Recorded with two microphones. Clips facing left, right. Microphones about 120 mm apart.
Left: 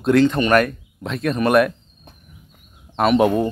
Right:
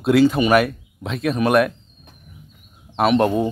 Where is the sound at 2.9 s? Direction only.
Centre (ahead or behind).